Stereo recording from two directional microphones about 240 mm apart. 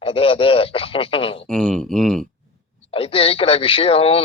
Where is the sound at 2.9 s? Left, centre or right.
Left.